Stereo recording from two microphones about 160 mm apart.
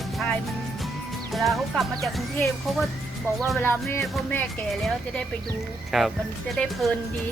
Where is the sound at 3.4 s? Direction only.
10° left (ahead or behind).